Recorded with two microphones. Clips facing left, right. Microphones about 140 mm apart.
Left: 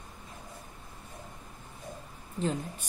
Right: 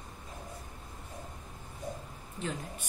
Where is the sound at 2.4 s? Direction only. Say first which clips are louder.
Left 6 dB; 35° left (ahead or behind).